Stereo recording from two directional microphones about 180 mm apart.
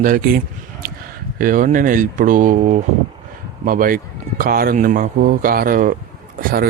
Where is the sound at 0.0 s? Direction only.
50° right (ahead or behind).